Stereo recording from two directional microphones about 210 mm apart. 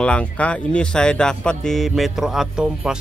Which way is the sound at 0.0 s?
5° left (ahead or behind).